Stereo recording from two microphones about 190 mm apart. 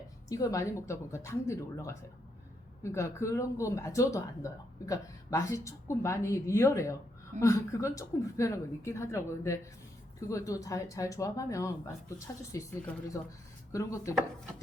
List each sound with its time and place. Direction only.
0.3 s speech: 15° left (ahead or behind)